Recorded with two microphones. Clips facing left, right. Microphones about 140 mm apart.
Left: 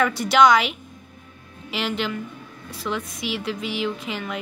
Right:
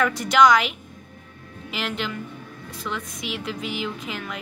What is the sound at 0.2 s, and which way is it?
Speech, centre (ahead or behind).